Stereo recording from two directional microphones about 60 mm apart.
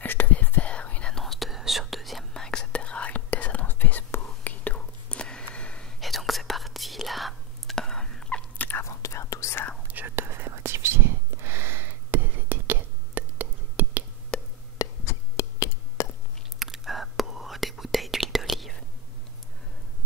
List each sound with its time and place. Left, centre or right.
0.0 s whispering: left
1.1 s whispering: centre
2.4 s whispering: centre
5.9 s whispering: centre
8.5 s whispering: left
8.8 s whispering: left
9.8 s whispering: right
14.3 s music: centre
14.8 s a sound: left
16.5 s whispering: centre